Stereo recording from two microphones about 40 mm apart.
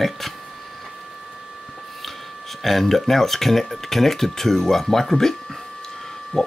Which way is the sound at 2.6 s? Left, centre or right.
Centre.